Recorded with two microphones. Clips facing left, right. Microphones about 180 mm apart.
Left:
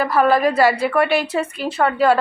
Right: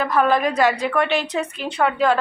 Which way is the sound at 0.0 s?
5° left (ahead or behind).